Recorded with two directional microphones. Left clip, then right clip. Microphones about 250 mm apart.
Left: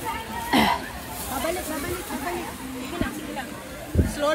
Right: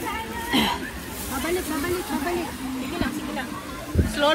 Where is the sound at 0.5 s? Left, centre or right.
Left.